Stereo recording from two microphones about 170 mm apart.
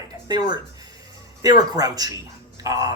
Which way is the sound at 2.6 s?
20° right (ahead or behind).